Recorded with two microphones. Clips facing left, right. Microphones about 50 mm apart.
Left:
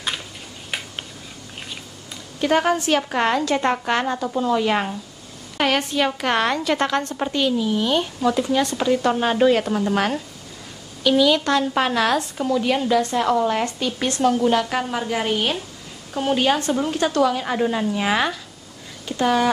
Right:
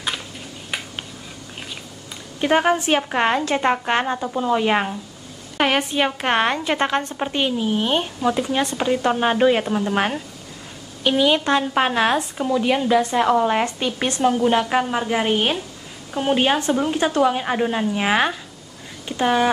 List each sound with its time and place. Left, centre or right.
2.4 s speech: right
9.7 s speech: centre
9.9 s a woman's voice: right